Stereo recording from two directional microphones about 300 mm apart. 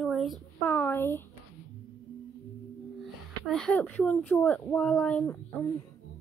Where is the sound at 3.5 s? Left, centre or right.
Centre.